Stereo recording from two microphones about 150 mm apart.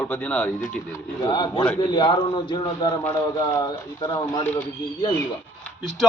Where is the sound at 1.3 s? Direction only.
30° left (ahead or behind).